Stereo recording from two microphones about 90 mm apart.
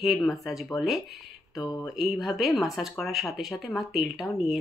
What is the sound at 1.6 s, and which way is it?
Speech, 45° left (ahead or behind).